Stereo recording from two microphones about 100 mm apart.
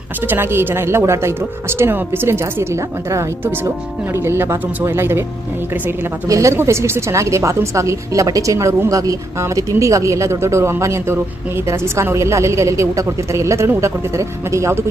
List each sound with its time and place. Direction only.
0.3 s speech: 20° right (ahead or behind)
6.2 s speech: 30° right (ahead or behind)